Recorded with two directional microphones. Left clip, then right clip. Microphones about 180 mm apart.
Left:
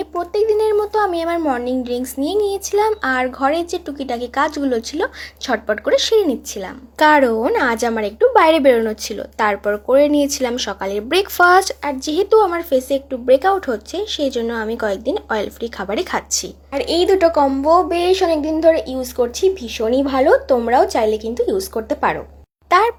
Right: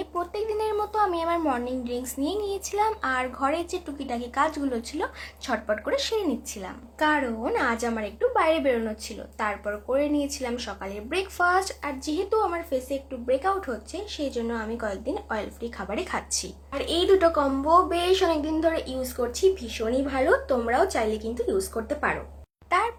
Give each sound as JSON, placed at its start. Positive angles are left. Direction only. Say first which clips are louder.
{"t": 0.0, "sound": "a woman's voice", "louder": "left 11 dB", "side_deg": 30}
{"t": 7.0, "sound": "a woman's voice", "louder": "left 12 dB", "side_deg": 55}
{"t": 7.4, "sound": "a woman's voice", "louder": "left 9 dB", "side_deg": 40}